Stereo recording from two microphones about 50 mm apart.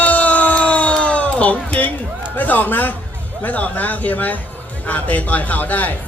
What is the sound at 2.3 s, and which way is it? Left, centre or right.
Speech, left.